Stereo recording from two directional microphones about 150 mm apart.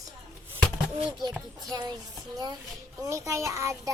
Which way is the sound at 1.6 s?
25° right (ahead or behind).